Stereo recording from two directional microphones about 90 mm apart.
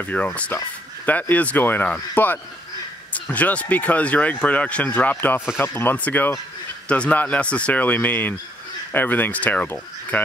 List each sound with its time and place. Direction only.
0.0 s speech: 15° left (ahead or behind)